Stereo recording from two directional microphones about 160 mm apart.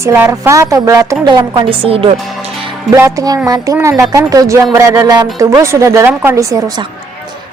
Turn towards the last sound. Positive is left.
turn(degrees=-25)  # may be behind; listen again after turning